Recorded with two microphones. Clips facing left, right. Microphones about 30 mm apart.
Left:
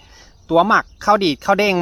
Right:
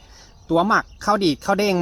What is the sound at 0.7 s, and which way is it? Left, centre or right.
Speech, centre.